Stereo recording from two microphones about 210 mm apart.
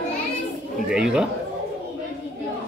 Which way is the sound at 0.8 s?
5° right (ahead or behind).